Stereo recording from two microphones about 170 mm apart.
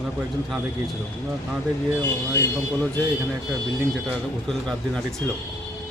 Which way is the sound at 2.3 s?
15° left (ahead or behind).